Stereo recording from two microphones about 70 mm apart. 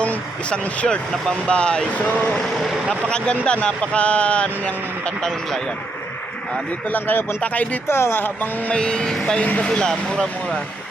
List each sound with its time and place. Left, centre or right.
0.0 s speech: left
6.8 s speech: left
7.9 s speech: left
8.7 s speech: centre
9.4 s speech: centre